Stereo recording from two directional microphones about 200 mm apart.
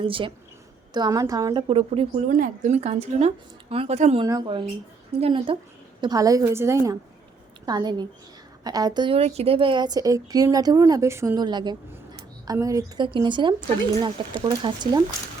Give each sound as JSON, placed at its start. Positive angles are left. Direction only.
{"t": 0.0, "sound": "speech", "side_deg": -25}
{"t": 2.3, "sound": "a woman's voice", "side_deg": -40}
{"t": 4.3, "sound": "a woman's voice", "side_deg": -20}